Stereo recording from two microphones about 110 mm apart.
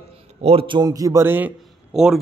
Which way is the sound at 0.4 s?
60° right (ahead or behind).